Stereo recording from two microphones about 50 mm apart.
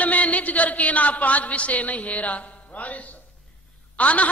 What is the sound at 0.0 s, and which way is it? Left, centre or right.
A man's voice, left.